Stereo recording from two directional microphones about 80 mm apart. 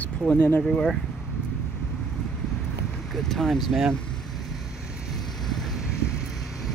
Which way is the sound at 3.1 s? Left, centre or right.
Centre.